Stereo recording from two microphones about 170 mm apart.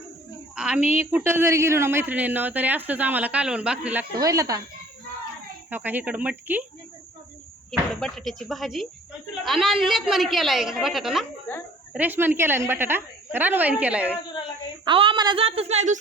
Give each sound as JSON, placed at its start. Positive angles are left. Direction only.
{"t": 0.5, "sound": "cricket", "side_deg": -5}
{"t": 0.9, "sound": "speech", "side_deg": -15}
{"t": 4.1, "sound": "speech", "side_deg": -20}
{"t": 5.7, "sound": "speech", "side_deg": -10}
{"t": 7.7, "sound": "a woman's voice", "side_deg": 5}
{"t": 14.8, "sound": "a woman's voice", "side_deg": -30}